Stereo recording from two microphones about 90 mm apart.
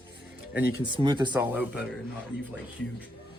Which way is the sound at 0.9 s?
60° right (ahead or behind).